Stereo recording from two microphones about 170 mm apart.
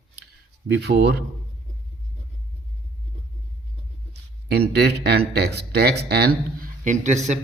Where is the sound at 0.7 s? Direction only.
80° right.